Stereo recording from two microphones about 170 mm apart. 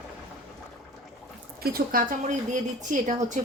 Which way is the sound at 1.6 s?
60° right (ahead or behind).